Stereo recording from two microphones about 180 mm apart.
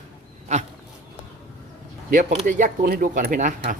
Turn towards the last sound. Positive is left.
turn(degrees=-45)  # may be behind; listen again after turning